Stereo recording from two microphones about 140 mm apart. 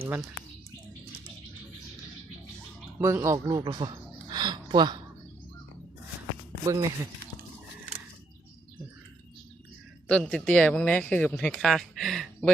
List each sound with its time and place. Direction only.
3.0 s speech: 20° right (ahead or behind)
6.7 s speech: 25° right (ahead or behind)
10.1 s speech: 5° left (ahead or behind)